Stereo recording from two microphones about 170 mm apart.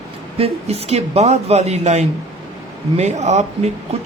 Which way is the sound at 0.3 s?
35° right (ahead or behind).